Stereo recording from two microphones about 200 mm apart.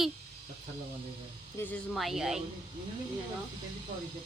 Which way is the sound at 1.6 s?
5° left (ahead or behind).